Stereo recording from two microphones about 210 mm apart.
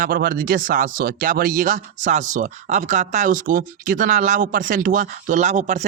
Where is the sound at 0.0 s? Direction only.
40° right (ahead or behind).